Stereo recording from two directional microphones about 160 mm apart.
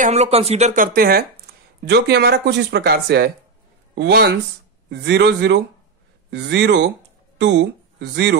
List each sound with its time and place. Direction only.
0.0 s speech: 45° right (ahead or behind)
0.9 s speech: 70° right (ahead or behind)
1.8 s speech: 90° right